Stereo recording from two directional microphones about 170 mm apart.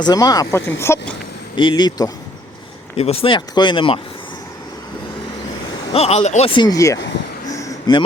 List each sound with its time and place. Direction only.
0.0 s speech: 25° left (ahead or behind)
1.5 s speech: 25° left (ahead or behind)
2.9 s speech: 35° left (ahead or behind)
5.9 s speech: 40° left (ahead or behind); by 7.0 s 20° left (ahead or behind)
7.4 s a sound: 20° left (ahead or behind)